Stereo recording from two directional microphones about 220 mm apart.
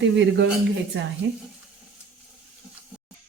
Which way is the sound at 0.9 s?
55° right (ahead or behind).